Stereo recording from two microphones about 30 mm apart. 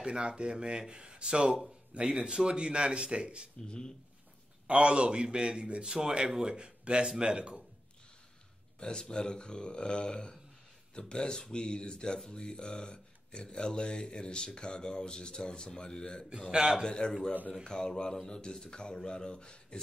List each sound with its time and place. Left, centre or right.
0.0 s speech: right
2.4 s speech: right
3.6 s speech: left
4.6 s speech: right
8.7 s speech: left